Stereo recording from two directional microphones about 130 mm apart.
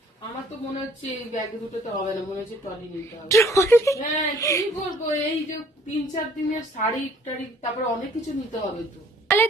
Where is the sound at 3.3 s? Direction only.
25° left (ahead or behind).